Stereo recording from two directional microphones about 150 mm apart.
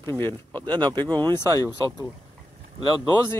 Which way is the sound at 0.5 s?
30° right (ahead or behind).